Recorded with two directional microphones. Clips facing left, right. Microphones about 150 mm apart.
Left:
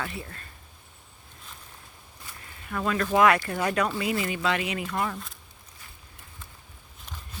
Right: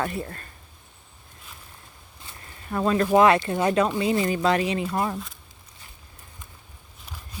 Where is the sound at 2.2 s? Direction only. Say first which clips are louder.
Right 4 dB; 30° right (ahead or behind).